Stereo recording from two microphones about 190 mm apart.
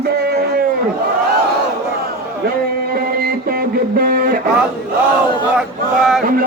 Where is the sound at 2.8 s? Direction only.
55° right (ahead or behind).